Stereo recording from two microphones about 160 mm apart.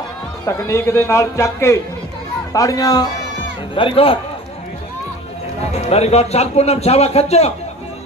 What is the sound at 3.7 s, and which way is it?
Speech, 35° left (ahead or behind).